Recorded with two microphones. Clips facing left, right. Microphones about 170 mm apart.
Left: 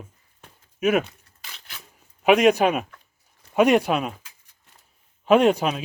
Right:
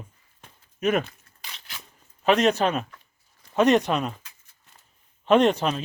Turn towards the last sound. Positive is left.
turn(degrees=10)  # may be behind; listen again after turning